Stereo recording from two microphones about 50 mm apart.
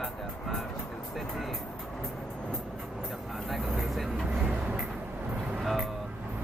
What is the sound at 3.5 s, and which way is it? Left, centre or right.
Vehicle, centre.